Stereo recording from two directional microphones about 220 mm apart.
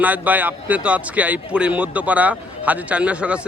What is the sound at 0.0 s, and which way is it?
Speech, 5° right (ahead or behind).